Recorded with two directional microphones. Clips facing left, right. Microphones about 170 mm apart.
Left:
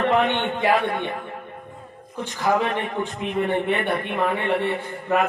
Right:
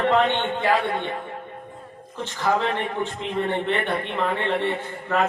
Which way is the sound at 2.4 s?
15° left (ahead or behind).